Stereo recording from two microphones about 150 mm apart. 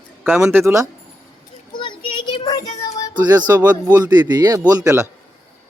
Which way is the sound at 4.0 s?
30° right (ahead or behind).